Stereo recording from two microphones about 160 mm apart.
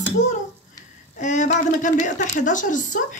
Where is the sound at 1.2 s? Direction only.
50° left (ahead or behind).